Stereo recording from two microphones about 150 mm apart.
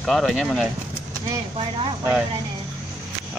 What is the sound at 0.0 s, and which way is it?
Speech, centre (ahead or behind).